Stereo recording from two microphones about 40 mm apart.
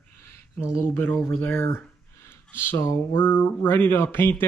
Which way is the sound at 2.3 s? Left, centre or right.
Left.